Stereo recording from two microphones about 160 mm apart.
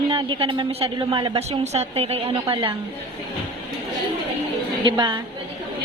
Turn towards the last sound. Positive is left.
turn(degrees=-30)  # may be behind; listen again after turning